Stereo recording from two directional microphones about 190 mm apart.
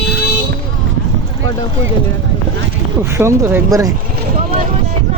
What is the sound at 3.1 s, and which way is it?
Speech, 15° right (ahead or behind).